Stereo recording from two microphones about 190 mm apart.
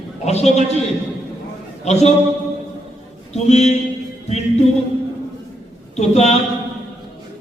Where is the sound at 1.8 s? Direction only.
35° left (ahead or behind).